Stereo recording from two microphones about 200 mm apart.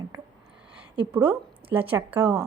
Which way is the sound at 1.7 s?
10° right (ahead or behind).